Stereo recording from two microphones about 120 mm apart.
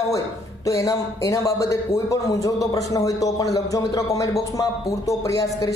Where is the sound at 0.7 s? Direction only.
25° left (ahead or behind).